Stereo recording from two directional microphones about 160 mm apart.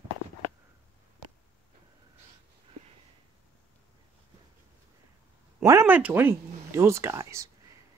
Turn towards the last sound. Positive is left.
turn(degrees=-20)  # may be behind; listen again after turning